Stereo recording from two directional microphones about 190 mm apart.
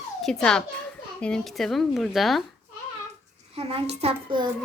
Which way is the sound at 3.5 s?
30° right (ahead or behind).